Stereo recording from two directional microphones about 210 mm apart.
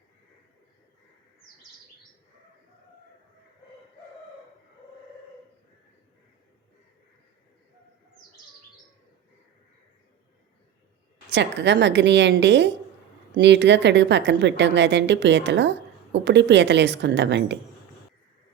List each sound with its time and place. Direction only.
11.3 s a woman's voice: 60° right (ahead or behind)